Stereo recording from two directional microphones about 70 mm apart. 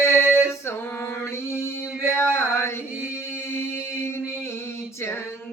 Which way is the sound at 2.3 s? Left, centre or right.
Left.